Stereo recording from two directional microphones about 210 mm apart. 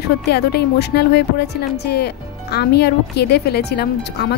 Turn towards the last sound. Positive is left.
turn(degrees=50)  # may be behind; listen again after turning